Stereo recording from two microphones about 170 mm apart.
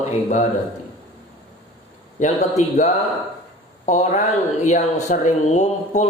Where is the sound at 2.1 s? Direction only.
45° left (ahead or behind).